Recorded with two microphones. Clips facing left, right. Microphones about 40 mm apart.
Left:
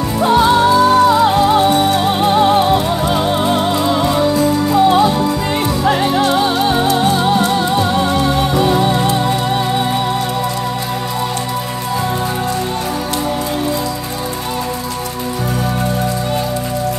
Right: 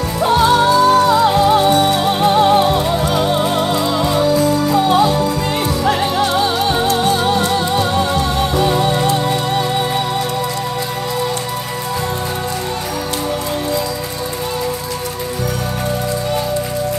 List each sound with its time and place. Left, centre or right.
0.2 s music: centre
1.0 s music: centre
4.3 s music: left
4.7 s music: centre
5.0 s music: left
5.9 s music: centre
6.9 s music: left
7.5 s music: centre